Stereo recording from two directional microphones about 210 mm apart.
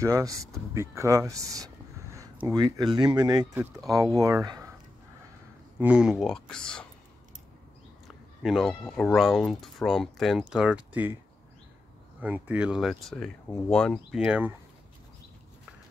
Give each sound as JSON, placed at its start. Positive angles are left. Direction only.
{"t": 0.0, "sound": "speech", "side_deg": -15}
{"t": 5.8, "sound": "speech", "side_deg": -5}
{"t": 8.4, "sound": "speech", "side_deg": 0}
{"t": 12.2, "sound": "speech", "side_deg": -5}